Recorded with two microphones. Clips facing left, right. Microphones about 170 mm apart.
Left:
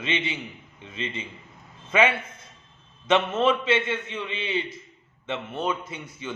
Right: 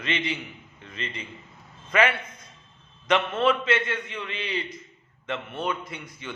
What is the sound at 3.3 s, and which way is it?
Speech, 10° left (ahead or behind).